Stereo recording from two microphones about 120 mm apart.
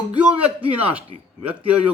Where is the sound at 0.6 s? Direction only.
15° right (ahead or behind).